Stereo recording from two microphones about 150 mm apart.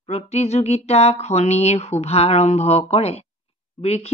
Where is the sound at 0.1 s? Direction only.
45° left (ahead or behind).